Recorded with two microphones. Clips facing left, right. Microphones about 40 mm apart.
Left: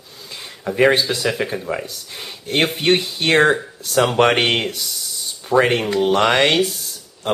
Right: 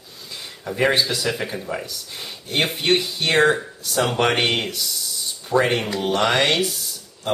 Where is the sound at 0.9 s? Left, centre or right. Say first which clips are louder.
Left 2 dB; centre.